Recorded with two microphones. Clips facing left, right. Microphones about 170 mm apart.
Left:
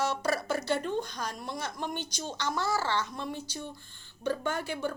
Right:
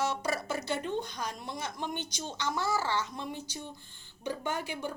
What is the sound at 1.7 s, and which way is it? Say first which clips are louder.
Speech: left 1 dB; 45° left (ahead or behind).